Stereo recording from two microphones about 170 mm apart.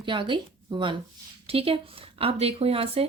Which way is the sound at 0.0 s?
30° right (ahead or behind).